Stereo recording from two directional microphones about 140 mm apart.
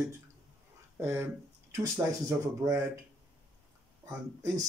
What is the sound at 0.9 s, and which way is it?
Speech, 15° right (ahead or behind).